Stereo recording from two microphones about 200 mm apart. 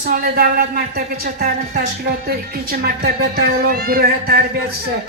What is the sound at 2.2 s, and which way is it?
Speech, 50° right (ahead or behind).